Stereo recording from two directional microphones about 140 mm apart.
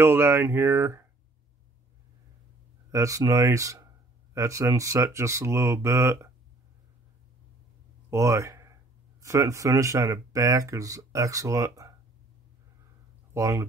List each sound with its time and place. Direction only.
0.0 s speech: 15° right (ahead or behind)
2.9 s speech: 25° right (ahead or behind)
8.1 s speech: 20° right (ahead or behind)
13.3 s speech: 20° right (ahead or behind)